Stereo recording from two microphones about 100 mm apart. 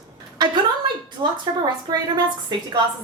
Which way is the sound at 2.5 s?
45° right (ahead or behind).